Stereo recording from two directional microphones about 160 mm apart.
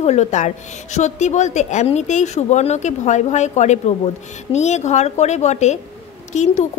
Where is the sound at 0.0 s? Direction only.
45° left (ahead or behind).